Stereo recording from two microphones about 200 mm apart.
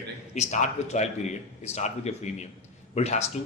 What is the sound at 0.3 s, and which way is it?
Speech, 35° left (ahead or behind).